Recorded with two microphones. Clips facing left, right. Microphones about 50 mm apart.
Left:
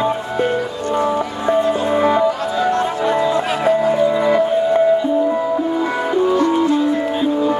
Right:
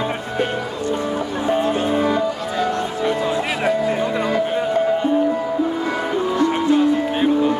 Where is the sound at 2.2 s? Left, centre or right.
Left.